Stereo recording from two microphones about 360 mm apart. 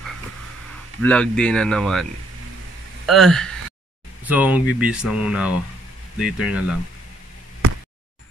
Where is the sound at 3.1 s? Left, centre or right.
Centre.